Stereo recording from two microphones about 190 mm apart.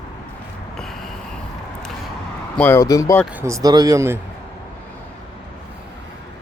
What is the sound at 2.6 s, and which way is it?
Speech, 10° left (ahead or behind).